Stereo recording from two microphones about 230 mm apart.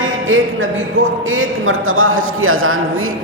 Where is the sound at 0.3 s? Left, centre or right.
Right.